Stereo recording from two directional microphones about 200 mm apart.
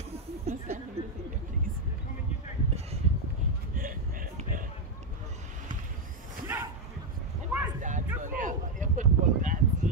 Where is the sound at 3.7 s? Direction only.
45° right (ahead or behind).